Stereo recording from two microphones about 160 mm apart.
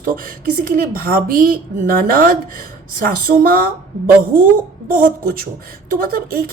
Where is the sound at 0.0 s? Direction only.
60° right (ahead or behind).